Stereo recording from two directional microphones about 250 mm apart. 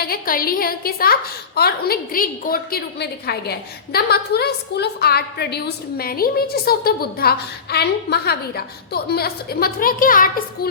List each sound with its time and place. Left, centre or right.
0.0 s a woman's voice: left